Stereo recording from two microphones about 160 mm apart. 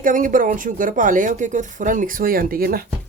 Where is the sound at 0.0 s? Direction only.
55° right (ahead or behind).